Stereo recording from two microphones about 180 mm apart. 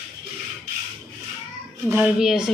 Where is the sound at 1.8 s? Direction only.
10° right (ahead or behind).